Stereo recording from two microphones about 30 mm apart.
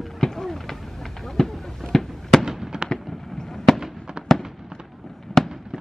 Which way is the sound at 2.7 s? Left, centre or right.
Right.